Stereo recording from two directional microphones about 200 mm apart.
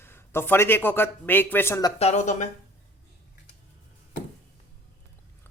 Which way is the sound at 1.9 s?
35° left (ahead or behind).